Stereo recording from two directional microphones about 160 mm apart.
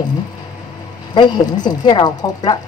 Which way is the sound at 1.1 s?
25° left (ahead or behind).